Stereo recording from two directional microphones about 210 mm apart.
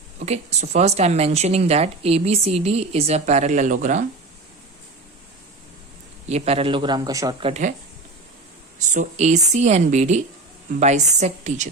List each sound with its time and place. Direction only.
0.2 s speech: 30° right (ahead or behind)
6.2 s speech: 30° right (ahead or behind)
8.9 s speech: 35° right (ahead or behind)